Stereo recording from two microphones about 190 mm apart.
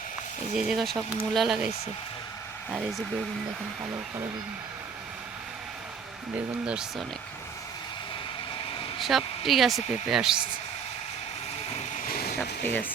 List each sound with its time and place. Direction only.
0.5 s speech: 5° right (ahead or behind)
6.3 s speech: 5° right (ahead or behind)
9.0 s speech: centre (ahead or behind)
12.0 s a sound: 50° left (ahead or behind)
12.6 s speech: 10° left (ahead or behind)